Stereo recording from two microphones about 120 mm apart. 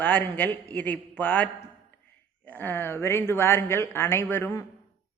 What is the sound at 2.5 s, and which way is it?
A man's voice, 15° left (ahead or behind).